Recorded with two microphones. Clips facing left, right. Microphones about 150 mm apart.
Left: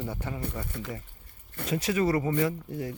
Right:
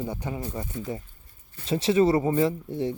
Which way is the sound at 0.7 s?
70° left (ahead or behind).